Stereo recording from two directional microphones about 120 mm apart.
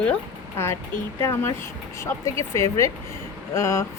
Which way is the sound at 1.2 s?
20° left (ahead or behind).